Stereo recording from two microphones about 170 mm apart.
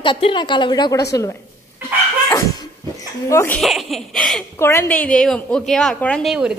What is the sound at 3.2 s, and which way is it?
Speech, 15° left (ahead or behind).